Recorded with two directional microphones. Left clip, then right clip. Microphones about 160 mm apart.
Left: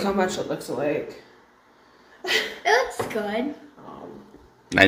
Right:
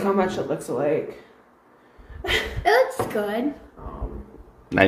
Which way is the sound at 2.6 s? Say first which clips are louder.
Right 4 dB; 80° right.